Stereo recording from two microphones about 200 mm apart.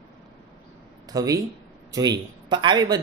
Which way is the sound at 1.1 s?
15° right (ahead or behind).